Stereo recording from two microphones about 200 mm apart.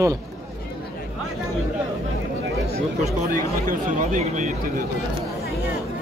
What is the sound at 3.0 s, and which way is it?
Speech, 45° right (ahead or behind).